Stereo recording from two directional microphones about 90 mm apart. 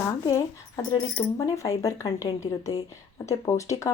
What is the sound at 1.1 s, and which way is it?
Speech, 35° left (ahead or behind).